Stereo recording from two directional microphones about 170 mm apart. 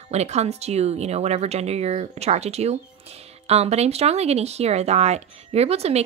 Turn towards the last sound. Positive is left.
turn(degrees=-35)  # may be behind; listen again after turning